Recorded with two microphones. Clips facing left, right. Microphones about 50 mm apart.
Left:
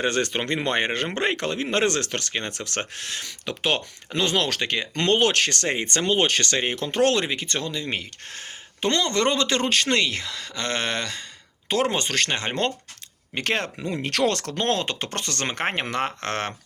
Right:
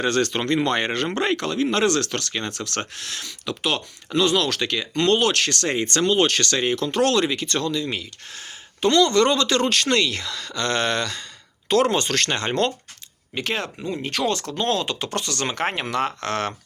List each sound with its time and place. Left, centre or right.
0.0 s speech: left
7.9 s speech: left; by 12.6 s centre
13.3 s speech: left
14.7 s speech: left